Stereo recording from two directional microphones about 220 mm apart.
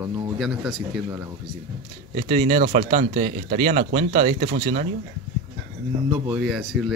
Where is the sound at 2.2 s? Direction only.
30° right (ahead or behind).